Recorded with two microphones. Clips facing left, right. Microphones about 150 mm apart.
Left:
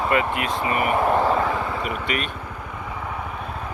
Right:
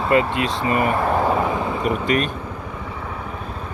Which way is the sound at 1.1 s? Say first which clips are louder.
Right 1 dB; 15° right (ahead or behind).